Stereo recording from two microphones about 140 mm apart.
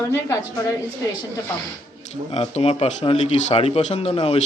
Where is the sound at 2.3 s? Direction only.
50° left (ahead or behind).